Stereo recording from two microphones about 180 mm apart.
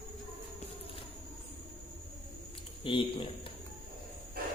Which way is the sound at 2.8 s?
30° left (ahead or behind).